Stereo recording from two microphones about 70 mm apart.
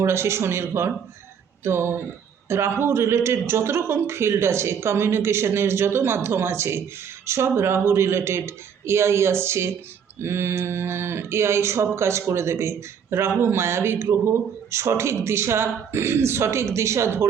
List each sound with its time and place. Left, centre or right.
0.0 s a man's voice: right